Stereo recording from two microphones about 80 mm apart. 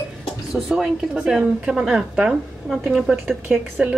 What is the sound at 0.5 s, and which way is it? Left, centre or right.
A woman's voice, centre.